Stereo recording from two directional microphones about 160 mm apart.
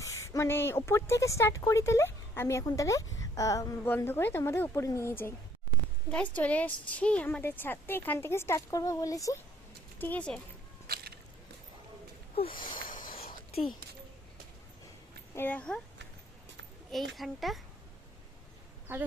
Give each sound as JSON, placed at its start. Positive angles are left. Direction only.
{"t": 0.0, "sound": "speech", "side_deg": 20}
{"t": 10.0, "sound": "speech", "side_deg": 10}
{"t": 10.8, "sound": "a sound", "side_deg": -75}
{"t": 12.7, "sound": "a sound", "side_deg": 55}
{"t": 15.4, "sound": "speech", "side_deg": 10}
{"t": 17.2, "sound": "a child's voice", "side_deg": 0}
{"t": 18.9, "sound": "speech", "side_deg": -15}